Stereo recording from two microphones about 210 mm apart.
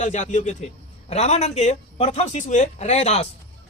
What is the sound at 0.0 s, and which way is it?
Speech, 35° left (ahead or behind).